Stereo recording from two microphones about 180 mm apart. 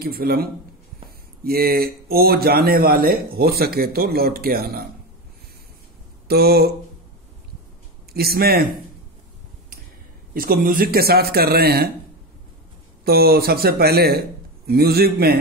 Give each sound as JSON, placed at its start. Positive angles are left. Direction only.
{"t": 0.0, "sound": "speech", "side_deg": -55}
{"t": 6.2, "sound": "a sound", "side_deg": -60}
{"t": 8.1, "sound": "speech", "side_deg": -60}
{"t": 10.3, "sound": "speech", "side_deg": -50}
{"t": 13.0, "sound": "speech", "side_deg": -60}